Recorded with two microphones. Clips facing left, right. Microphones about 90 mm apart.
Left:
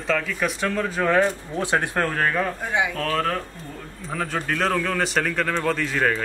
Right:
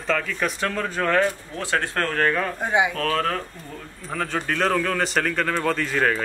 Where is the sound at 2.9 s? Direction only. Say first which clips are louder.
Even; centre (ahead or behind).